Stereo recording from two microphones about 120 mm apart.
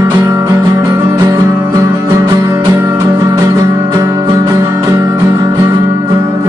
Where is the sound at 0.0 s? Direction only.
25° right (ahead or behind).